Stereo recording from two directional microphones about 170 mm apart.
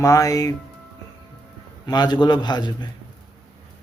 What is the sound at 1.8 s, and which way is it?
A man's voice, 25° left (ahead or behind).